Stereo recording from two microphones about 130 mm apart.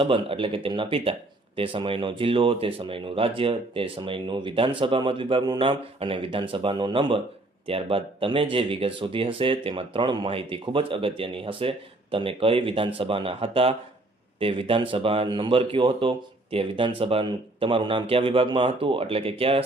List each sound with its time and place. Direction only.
0.0 s speech: 40° right (ahead or behind)